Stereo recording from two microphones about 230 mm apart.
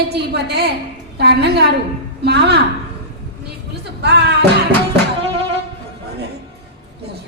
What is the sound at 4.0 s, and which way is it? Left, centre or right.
Speech, right.